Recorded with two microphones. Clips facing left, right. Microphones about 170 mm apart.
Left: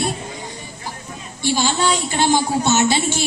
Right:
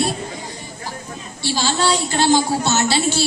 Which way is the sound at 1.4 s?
15° left (ahead or behind).